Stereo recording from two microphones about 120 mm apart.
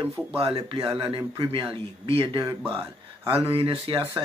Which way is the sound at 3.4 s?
50° right (ahead or behind).